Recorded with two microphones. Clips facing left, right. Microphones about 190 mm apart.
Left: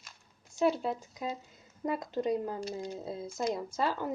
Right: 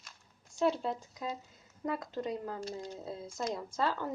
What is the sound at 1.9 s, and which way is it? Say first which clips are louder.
Speech: left 4 dB; 20° left (ahead or behind).